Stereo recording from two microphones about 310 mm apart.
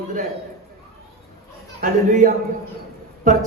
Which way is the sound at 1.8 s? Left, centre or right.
Right.